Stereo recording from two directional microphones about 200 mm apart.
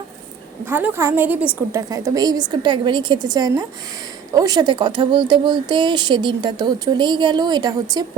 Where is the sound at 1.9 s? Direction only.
20° right (ahead or behind).